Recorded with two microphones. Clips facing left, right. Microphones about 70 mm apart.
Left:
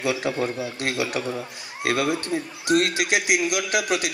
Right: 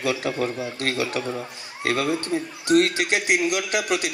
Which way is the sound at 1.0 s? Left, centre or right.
Left.